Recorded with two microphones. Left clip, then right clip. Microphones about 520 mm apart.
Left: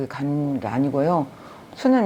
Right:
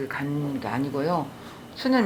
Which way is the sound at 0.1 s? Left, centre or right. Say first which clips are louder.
Left 4 dB; left.